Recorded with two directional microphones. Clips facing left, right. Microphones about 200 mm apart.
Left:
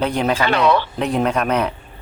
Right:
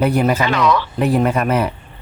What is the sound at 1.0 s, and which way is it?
Speech, 5° right (ahead or behind).